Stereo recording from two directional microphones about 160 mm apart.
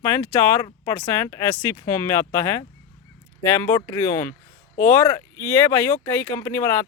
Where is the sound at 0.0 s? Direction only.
15° left (ahead or behind).